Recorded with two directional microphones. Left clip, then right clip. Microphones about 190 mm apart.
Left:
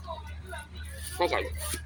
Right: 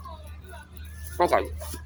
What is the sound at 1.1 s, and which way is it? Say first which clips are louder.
Speech: right 6 dB; 35° right (ahead or behind).